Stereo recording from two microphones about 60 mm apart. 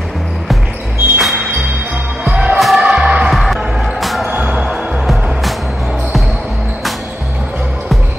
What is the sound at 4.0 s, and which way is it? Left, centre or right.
Music, centre.